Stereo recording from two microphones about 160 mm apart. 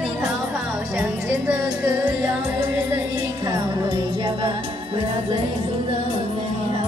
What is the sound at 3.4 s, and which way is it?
Music, 25° right (ahead or behind).